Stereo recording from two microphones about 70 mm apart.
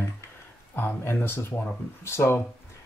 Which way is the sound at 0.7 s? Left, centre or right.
Left.